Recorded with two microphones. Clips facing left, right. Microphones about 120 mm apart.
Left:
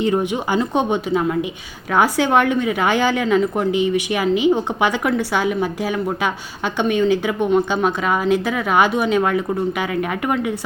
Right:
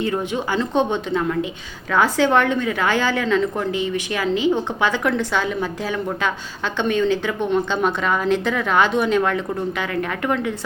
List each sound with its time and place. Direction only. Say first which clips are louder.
0.0 s a woman's voice: left 3 dB; 15° left (ahead or behind)
6.7 s a woman's voice: left 2 dB; 15° left (ahead or behind)